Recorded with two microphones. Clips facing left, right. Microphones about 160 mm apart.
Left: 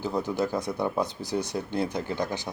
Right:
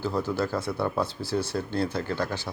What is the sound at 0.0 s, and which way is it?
Speech, 15° left (ahead or behind).